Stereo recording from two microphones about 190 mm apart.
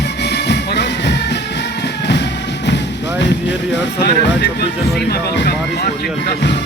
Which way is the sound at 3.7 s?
65° left (ahead or behind).